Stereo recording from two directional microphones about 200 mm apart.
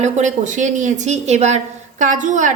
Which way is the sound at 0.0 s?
35° right (ahead or behind).